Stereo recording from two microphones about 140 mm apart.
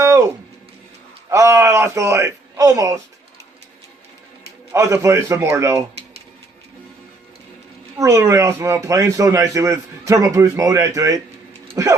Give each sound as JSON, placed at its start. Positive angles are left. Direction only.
{"t": 0.0, "sound": "music", "side_deg": -20}
{"t": 1.3, "sound": "a man's voice", "side_deg": -20}
{"t": 4.7, "sound": "speech", "side_deg": -20}
{"t": 7.9, "sound": "speech", "side_deg": -20}